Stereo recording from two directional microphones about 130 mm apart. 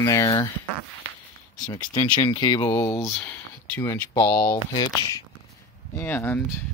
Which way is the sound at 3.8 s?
25° left (ahead or behind).